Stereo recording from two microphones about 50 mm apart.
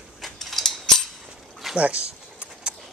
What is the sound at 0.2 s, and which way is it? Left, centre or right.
Mechanisms, centre.